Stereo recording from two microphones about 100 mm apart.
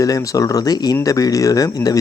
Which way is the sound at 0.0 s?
35° left (ahead or behind).